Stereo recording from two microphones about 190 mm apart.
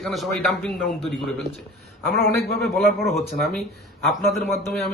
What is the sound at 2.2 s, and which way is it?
A man's voice, 50° left (ahead or behind).